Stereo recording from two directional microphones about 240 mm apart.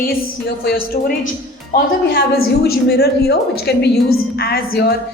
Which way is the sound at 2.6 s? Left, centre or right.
Left.